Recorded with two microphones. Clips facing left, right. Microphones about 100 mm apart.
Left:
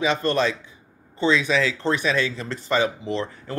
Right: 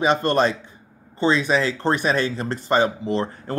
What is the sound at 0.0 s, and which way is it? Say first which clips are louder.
Speech: right 3 dB; 45° right (ahead or behind).